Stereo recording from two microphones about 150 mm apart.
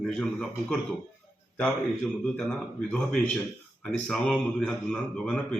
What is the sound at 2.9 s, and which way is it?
A man's voice, 10° left (ahead or behind).